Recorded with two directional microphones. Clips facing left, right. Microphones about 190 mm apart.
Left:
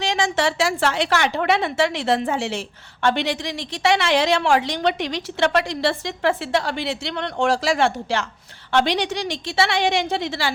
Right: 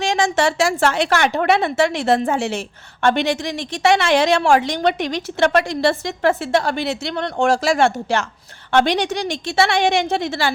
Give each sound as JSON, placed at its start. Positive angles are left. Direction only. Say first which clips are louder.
{"t": 0.0, "sound": "a woman's voice", "louder": "right 3 dB", "side_deg": -50}